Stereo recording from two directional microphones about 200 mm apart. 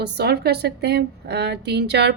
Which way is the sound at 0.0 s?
55° right (ahead or behind).